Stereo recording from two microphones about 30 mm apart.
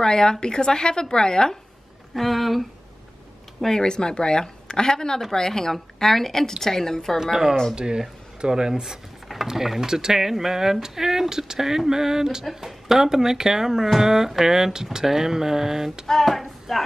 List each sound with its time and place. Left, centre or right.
0.0 s speech: left
2.1 s speech: centre
3.8 s a woman's voice: left
7.7 s speech: right
16.1 s a sound: centre